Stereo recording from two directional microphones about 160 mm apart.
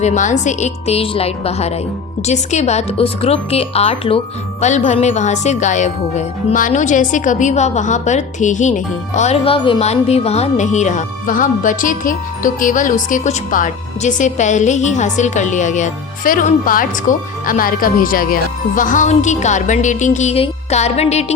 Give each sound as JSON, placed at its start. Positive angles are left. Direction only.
{"t": 0.0, "sound": "speech", "side_deg": 50}